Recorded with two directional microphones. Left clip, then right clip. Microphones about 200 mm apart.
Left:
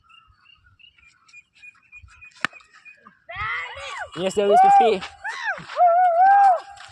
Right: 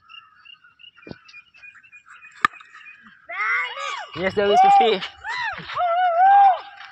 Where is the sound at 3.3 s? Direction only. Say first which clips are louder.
Right 5 dB; 75° left (ahead or behind).